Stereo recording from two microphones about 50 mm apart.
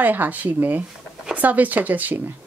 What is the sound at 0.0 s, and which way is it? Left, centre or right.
Speech, right.